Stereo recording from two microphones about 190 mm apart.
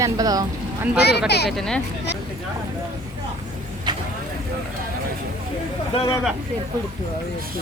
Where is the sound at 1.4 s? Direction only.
Centre (ahead or behind).